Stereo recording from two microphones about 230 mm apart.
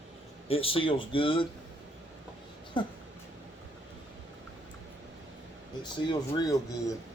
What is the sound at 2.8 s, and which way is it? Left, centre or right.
Speech, left.